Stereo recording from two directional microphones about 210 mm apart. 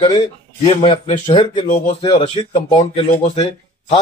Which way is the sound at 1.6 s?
40° left (ahead or behind).